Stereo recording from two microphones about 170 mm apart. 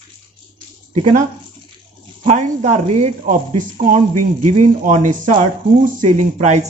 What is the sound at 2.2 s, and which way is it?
Speech, 45° right (ahead or behind).